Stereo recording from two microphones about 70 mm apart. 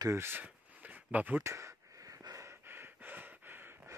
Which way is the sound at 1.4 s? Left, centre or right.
Right.